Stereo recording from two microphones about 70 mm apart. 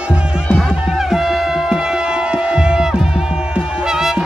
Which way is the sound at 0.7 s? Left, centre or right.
Centre.